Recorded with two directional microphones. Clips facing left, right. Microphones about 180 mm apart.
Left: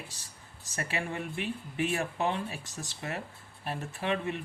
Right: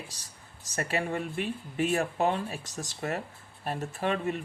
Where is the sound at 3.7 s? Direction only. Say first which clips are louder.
Right 2 dB; 40° right (ahead or behind).